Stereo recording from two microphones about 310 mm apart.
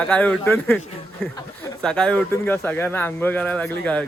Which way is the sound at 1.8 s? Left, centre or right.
Centre.